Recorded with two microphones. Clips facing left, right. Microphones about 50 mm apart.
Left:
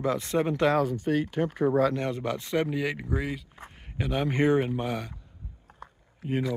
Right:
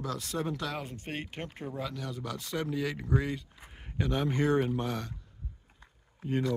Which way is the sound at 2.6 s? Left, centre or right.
Centre.